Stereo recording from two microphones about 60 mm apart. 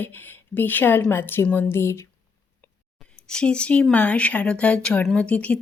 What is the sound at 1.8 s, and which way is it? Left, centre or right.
Speech, left.